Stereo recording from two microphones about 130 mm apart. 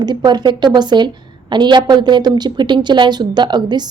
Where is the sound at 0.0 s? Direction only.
35° right (ahead or behind).